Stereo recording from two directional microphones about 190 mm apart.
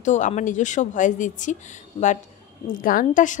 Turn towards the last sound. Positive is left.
turn(degrees=45)  # may be behind; listen again after turning